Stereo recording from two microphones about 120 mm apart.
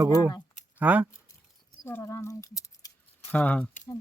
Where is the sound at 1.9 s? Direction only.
30° left (ahead or behind).